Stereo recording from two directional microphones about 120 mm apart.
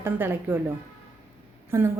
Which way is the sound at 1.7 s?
20° right (ahead or behind).